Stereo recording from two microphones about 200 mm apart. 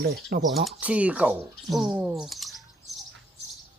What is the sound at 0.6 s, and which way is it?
Fowl, 5° right (ahead or behind).